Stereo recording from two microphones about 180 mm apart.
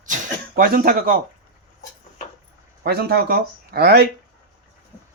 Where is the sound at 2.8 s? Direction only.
60° right (ahead or behind).